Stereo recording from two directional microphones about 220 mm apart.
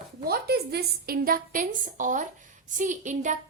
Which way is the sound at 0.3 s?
45° right (ahead or behind).